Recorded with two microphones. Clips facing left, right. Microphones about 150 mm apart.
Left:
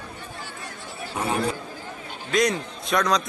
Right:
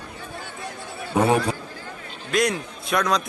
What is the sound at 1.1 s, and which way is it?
Speech, 65° right (ahead or behind).